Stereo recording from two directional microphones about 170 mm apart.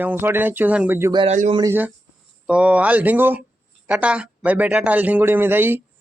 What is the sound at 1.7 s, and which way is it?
Speech, 10° right (ahead or behind).